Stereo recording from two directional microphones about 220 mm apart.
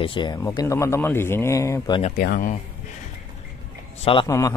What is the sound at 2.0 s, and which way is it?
Speech, 40° left (ahead or behind).